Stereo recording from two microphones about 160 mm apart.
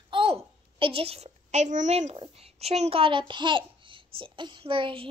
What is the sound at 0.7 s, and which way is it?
A child's voice, 35° right (ahead or behind).